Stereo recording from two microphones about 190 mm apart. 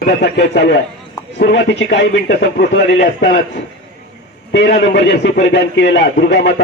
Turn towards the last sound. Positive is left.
turn(degrees=65)  # may be behind; listen again after turning